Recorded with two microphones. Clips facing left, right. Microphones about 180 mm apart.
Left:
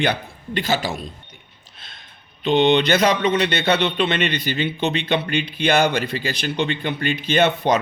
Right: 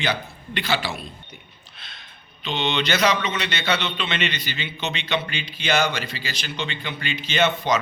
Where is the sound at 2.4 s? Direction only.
55° left (ahead or behind).